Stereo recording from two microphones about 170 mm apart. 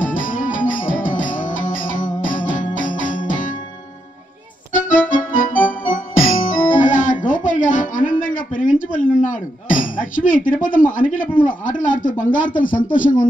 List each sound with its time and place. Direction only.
0.0 s music: 50° left (ahead or behind)
4.7 s keyboard: 50° left (ahead or behind)